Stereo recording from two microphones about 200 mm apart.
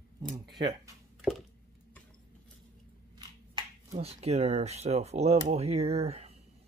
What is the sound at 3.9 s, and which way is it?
Speech, 30° right (ahead or behind).